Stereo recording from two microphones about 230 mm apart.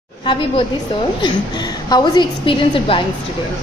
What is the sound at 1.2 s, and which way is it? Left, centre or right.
A woman's voice, centre.